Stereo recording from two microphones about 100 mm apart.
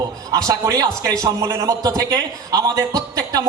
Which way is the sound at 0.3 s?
30° right (ahead or behind).